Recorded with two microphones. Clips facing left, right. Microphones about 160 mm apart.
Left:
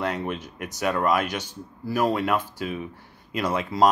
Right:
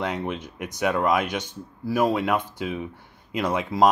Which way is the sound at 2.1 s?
15° right (ahead or behind).